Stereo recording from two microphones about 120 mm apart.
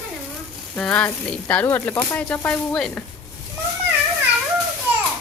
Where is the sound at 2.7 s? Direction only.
5° left (ahead or behind).